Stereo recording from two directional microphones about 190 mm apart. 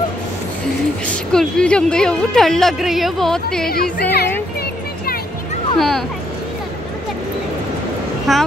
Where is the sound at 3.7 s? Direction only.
55° left (ahead or behind).